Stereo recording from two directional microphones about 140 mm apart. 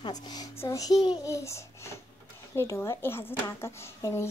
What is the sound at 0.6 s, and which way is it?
A child's voice, 25° left (ahead or behind).